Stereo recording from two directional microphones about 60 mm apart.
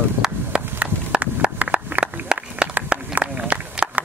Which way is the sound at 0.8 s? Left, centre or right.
Right.